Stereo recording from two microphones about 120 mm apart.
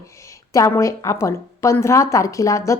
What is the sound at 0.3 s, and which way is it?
A woman's voice, 25° left (ahead or behind).